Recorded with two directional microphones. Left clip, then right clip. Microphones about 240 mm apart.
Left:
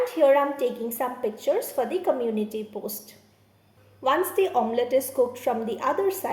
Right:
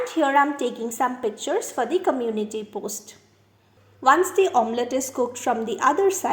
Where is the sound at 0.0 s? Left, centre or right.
Right.